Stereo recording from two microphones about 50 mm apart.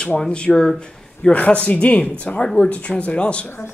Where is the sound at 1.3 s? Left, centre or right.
Left.